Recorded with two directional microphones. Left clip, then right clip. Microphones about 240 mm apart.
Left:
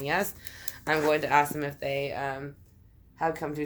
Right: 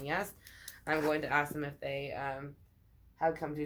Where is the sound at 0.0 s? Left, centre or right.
Left.